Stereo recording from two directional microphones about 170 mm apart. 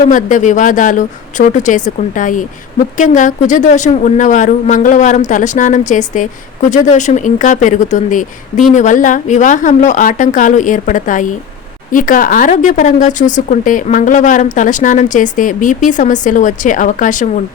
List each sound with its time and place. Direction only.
0.0 s speech: 50° left (ahead or behind)